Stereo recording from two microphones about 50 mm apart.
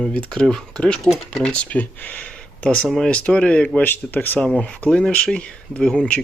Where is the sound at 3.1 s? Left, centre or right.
Left.